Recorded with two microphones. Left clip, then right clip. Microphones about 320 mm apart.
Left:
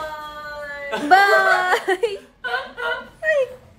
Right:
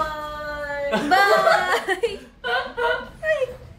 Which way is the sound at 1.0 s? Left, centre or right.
Left.